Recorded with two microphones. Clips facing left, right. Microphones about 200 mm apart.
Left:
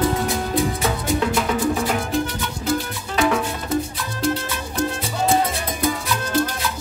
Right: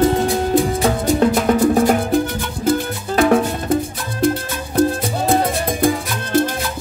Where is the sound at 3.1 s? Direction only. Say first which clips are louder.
Right 6 dB; 50° right (ahead or behind).